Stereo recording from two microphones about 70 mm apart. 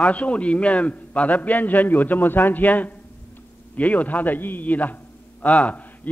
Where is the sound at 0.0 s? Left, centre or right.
Centre.